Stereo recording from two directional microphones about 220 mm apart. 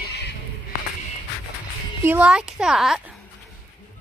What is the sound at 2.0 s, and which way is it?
Speech, 5° right (ahead or behind).